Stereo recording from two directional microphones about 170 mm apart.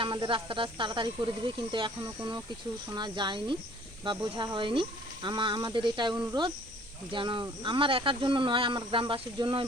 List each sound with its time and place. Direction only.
0.0 s speech: 30° right (ahead or behind)